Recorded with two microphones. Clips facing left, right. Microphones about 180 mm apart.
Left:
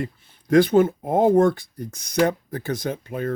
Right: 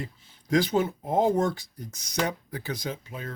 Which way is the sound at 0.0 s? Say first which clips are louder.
Left 8 dB; 60° left (ahead or behind).